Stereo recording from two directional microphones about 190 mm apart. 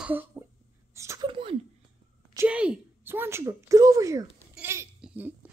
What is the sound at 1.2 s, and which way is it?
Speech, 30° right (ahead or behind).